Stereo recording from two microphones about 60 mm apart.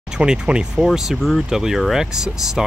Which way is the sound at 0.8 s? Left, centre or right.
Centre.